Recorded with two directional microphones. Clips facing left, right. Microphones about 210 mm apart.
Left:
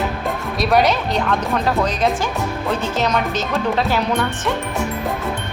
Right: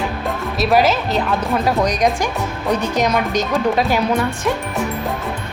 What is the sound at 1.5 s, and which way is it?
Speech, 15° right (ahead or behind).